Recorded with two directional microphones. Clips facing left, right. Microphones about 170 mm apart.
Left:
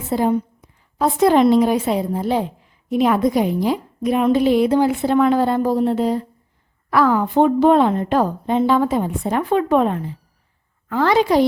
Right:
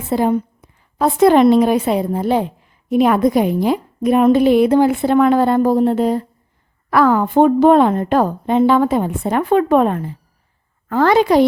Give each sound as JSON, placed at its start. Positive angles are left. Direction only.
{"t": 0.1, "sound": "a woman's voice", "side_deg": -65}